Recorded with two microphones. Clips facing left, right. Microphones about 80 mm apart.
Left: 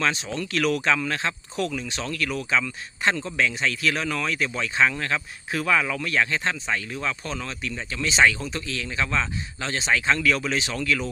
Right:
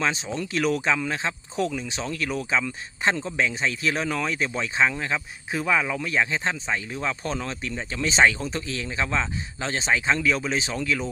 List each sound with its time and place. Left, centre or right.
0.0 s speech: centre